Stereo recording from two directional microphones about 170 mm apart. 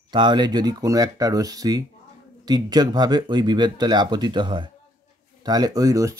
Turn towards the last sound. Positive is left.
turn(degrees=-20)  # may be behind; listen again after turning